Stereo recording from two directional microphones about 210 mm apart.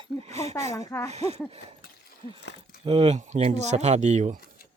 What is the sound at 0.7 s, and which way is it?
Speech, 15° left (ahead or behind).